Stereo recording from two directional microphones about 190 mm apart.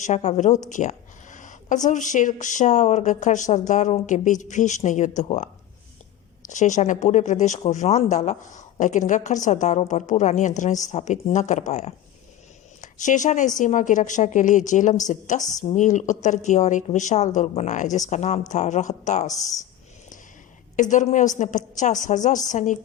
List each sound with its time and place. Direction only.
0.0 s speech: 35° left (ahead or behind)
20.9 s speech: 40° left (ahead or behind)